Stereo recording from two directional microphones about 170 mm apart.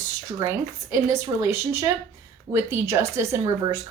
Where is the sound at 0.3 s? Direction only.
15° right (ahead or behind).